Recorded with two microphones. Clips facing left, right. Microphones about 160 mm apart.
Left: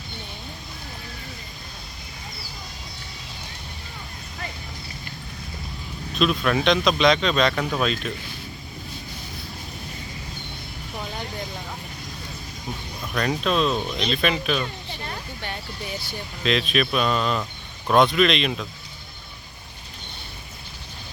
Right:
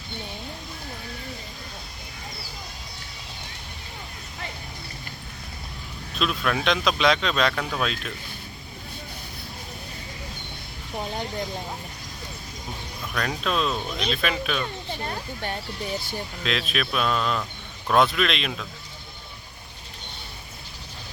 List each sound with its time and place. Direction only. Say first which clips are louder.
6.1 s speech: left 4 dB; centre (ahead or behind)
13.1 s speech: left 4 dB; centre (ahead or behind)
15.0 s speech: right 2 dB; 45° right (ahead or behind)
16.4 s speech: left 6 dB; centre (ahead or behind)